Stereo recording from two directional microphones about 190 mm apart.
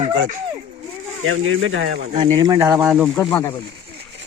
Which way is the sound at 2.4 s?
20° right (ahead or behind).